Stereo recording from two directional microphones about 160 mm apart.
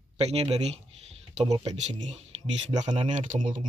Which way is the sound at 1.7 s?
50° right (ahead or behind).